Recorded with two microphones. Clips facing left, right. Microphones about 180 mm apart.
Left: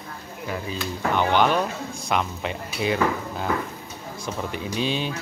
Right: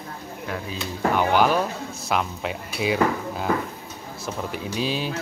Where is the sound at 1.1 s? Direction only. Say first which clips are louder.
Even; 5° right (ahead or behind).